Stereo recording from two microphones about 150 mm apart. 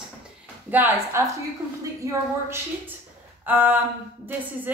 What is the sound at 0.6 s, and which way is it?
Speech, 10° right (ahead or behind).